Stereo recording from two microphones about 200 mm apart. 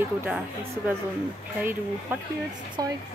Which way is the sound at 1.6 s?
10° right (ahead or behind).